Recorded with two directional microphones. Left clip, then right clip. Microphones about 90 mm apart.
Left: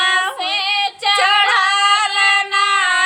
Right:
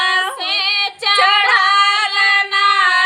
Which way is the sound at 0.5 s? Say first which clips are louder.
Right 2 dB; 40° right (ahead or behind).